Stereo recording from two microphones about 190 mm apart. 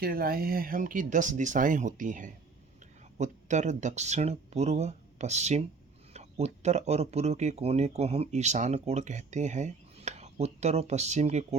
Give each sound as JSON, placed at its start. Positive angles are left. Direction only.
{"t": 0.0, "sound": "speech", "side_deg": -50}